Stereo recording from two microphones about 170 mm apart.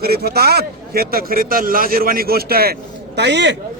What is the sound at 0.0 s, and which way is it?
A man's voice, 65° right (ahead or behind).